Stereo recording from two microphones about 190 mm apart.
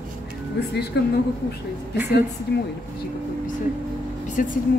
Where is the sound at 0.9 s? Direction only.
65° left (ahead or behind).